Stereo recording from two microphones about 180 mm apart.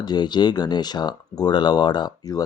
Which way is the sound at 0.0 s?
25° left (ahead or behind).